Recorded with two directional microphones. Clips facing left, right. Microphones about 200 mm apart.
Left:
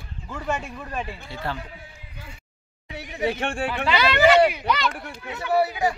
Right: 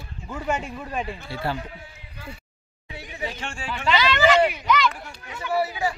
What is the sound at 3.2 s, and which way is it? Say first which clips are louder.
A man's voice: left 8 dB; 60° left (ahead or behind).